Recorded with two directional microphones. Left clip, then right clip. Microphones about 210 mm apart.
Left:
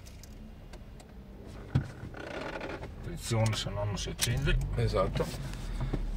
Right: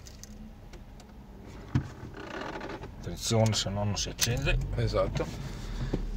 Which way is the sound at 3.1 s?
60° right (ahead or behind).